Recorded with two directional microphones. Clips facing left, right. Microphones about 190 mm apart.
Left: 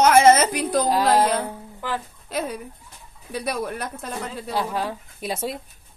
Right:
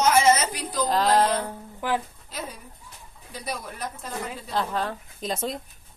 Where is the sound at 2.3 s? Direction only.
65° left (ahead or behind).